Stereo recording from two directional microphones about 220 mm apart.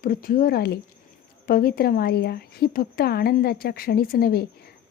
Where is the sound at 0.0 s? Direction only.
40° left (ahead or behind).